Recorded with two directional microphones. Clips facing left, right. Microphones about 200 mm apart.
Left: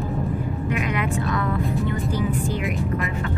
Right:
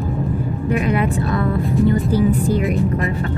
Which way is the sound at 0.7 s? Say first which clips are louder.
Right 7 dB; 35° right (ahead or behind).